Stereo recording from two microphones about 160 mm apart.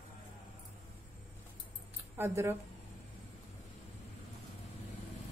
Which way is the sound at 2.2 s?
15° right (ahead or behind).